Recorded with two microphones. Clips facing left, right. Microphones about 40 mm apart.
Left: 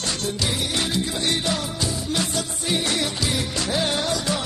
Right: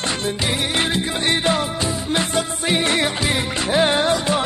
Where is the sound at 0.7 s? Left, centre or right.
Right.